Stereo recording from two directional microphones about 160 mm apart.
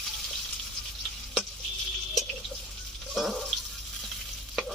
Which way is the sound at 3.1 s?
Centre (ahead or behind).